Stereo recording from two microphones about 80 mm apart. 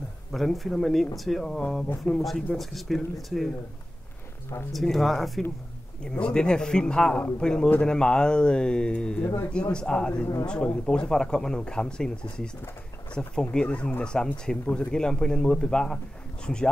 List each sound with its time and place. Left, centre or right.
0.3 s speech: centre
4.7 s speech: centre